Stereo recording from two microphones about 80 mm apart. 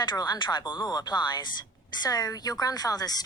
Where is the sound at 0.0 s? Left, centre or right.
Left.